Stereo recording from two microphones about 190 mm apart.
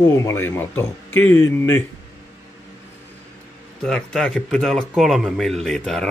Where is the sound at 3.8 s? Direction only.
5° left (ahead or behind).